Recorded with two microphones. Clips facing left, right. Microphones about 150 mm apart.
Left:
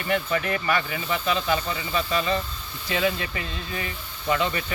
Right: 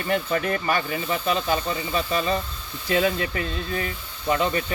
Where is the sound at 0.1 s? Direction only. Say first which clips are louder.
Right 1 dB; 40° right (ahead or behind).